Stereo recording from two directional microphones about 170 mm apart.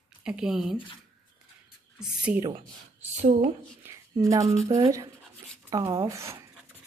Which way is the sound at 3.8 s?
20° right (ahead or behind).